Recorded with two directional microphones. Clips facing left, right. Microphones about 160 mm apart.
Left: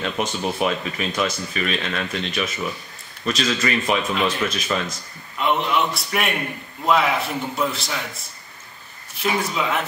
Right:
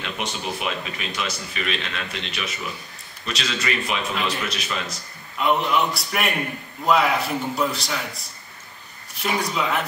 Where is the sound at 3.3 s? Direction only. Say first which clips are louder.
Left 5 dB; 45° left (ahead or behind).